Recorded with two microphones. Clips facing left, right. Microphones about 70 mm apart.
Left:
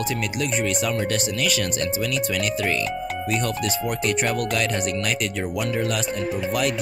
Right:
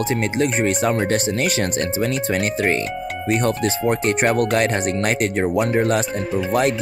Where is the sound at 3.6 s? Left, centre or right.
Right.